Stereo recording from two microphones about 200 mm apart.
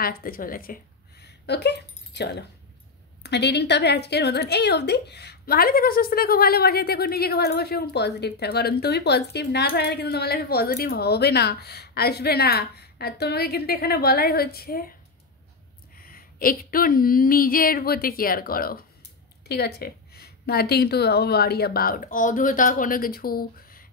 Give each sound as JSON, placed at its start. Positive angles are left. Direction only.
{"t": 0.0, "sound": "a woman's voice", "side_deg": 45}
{"t": 1.2, "sound": "a sound", "side_deg": 55}
{"t": 3.2, "sound": "a woman's voice", "side_deg": 55}
{"t": 16.0, "sound": "a woman's voice", "side_deg": 45}